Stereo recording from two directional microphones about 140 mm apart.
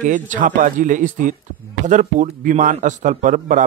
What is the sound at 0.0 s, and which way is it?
A man's voice, 65° right (ahead or behind).